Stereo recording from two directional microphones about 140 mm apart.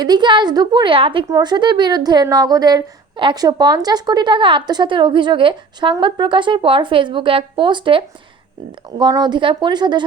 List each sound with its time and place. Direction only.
0.0 s a woman's voice: 30° right (ahead or behind)